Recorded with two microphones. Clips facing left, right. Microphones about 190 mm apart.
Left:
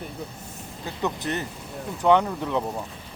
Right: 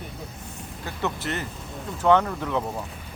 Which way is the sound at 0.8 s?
15° left (ahead or behind).